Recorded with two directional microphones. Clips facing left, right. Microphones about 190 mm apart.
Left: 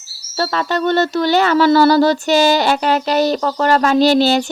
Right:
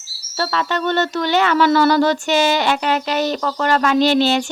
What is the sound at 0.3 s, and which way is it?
Speech, 35° left (ahead or behind).